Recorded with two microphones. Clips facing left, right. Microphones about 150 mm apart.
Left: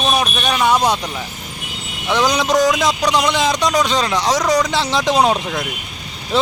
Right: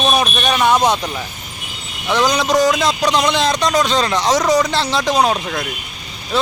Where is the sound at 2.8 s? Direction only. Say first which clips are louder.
Even; 15° left (ahead or behind).